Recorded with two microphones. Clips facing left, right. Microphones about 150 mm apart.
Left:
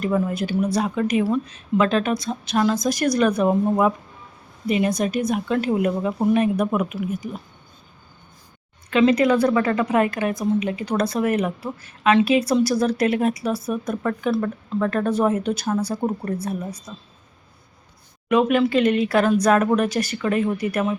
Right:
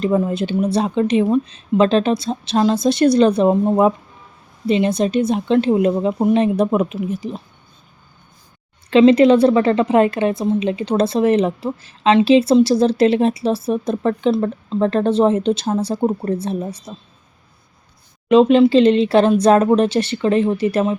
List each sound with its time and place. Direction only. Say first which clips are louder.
0.0 s a woman's voice: right 4 dB; 25° right (ahead or behind)
8.9 s a woman's voice: right 7 dB; 25° right (ahead or behind)
18.3 s a woman's voice: right 7 dB; 25° right (ahead or behind)